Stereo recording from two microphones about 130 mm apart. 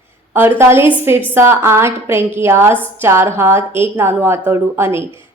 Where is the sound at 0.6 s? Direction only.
20° right (ahead or behind).